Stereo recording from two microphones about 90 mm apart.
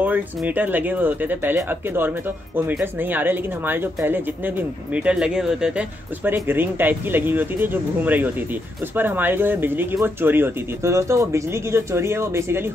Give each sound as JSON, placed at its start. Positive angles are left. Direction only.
{"t": 0.5, "sound": "speech", "side_deg": -20}
{"t": 6.2, "sound": "speech", "side_deg": -25}